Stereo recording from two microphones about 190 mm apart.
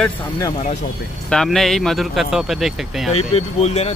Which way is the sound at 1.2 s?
Centre (ahead or behind).